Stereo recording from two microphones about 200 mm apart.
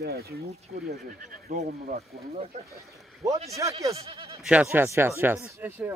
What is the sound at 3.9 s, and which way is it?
Speech, 30° right (ahead or behind).